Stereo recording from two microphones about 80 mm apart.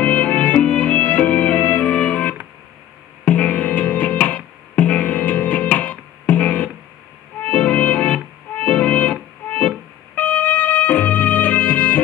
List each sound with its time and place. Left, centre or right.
0.0 s music: left